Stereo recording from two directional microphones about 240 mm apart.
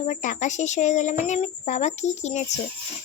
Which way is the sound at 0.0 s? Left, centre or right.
Left.